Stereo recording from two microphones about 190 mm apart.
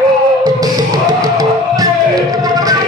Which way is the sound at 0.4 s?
20° right (ahead or behind).